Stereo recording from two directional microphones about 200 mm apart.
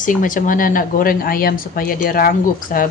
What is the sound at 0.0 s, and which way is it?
Speech, 40° left (ahead or behind).